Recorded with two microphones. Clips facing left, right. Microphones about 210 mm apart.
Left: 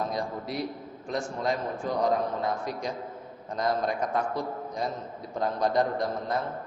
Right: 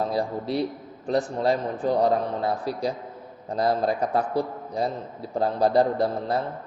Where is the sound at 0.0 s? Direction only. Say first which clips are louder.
Right 5 dB; 30° right (ahead or behind).